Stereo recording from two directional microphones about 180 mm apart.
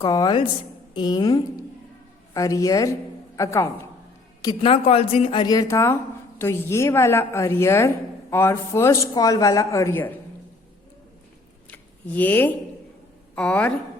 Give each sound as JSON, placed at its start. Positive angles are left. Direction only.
{"t": 0.0, "sound": "a woman's voice", "side_deg": 20}
{"t": 4.4, "sound": "a woman's voice", "side_deg": 30}
{"t": 11.7, "sound": "a sound", "side_deg": 10}
{"t": 13.3, "sound": "a woman's voice", "side_deg": 5}